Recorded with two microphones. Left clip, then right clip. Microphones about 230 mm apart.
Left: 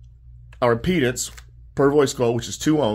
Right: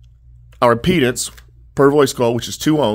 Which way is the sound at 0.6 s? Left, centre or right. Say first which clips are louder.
Right 6 dB; right.